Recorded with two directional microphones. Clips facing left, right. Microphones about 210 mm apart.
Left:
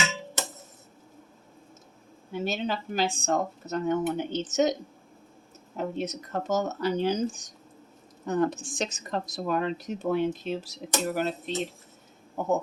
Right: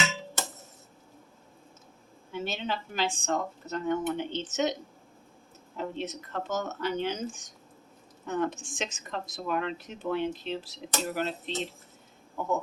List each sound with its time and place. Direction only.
2.3 s speech: 40° left (ahead or behind)
5.7 s speech: 40° left (ahead or behind)